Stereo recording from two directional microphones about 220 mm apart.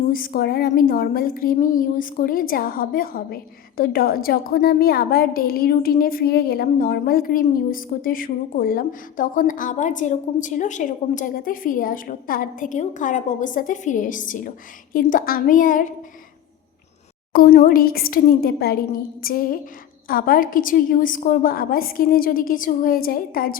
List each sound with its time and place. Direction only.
0.1 s a woman's voice: 40° left (ahead or behind)
17.3 s a woman's voice: 40° left (ahead or behind)